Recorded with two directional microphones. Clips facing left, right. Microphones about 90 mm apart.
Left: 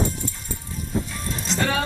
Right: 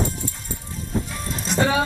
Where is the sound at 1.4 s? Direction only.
15° right (ahead or behind).